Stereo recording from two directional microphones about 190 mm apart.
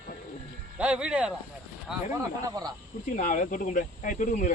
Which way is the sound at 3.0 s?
45° left (ahead or behind).